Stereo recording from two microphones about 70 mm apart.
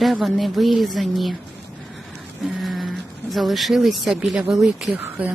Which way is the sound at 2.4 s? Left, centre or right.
Centre.